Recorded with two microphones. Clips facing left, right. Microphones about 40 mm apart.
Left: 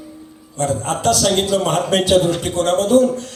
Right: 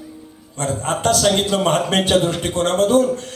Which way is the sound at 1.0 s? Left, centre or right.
Right.